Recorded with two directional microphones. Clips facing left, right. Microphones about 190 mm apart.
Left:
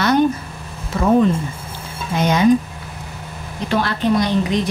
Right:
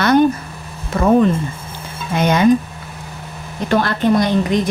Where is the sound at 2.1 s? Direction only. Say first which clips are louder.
Right 2 dB; 60° right (ahead or behind).